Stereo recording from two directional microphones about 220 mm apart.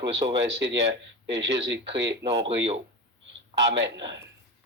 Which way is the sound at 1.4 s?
55° right (ahead or behind).